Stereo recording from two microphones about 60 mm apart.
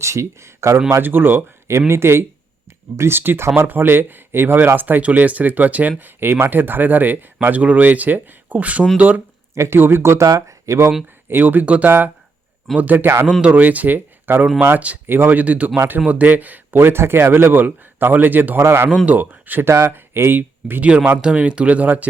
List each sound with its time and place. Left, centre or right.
0.0 s speech: right
1.0 s speech: right
9.6 s speech: right
10.2 s speech: right
11.3 s speech: right
13.4 s speech: right
18.6 s speech: right
19.0 s speech: right
20.8 s speech: right